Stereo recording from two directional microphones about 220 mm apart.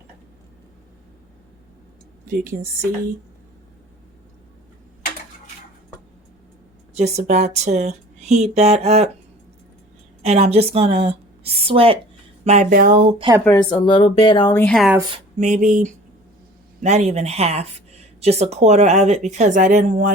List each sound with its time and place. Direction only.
2.3 s speech: 40° right (ahead or behind)
6.9 s speech: 30° right (ahead or behind)
10.2 s speech: 30° right (ahead or behind)
12.5 s speech: 35° right (ahead or behind)
13.1 s speech: 20° right (ahead or behind)
13.7 s speech: 20° left (ahead or behind)
14.6 s speech: centre (ahead or behind)
15.1 s speech: 35° right (ahead or behind)